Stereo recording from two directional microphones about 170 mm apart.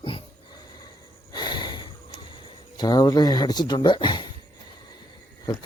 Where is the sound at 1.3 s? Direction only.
25° left (ahead or behind).